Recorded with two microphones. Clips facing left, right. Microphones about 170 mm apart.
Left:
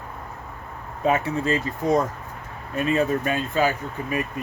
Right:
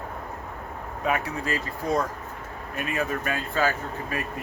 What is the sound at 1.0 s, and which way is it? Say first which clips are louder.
Speech: left 6 dB; 25° left (ahead or behind).